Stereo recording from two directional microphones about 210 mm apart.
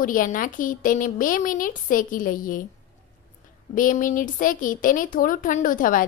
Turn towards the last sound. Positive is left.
turn(degrees=40)  # may be behind; listen again after turning